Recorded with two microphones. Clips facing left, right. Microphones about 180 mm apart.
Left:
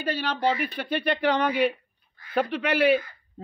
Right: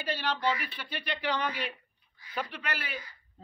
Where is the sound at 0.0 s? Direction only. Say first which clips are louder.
Left 5 dB; 50° left (ahead or behind).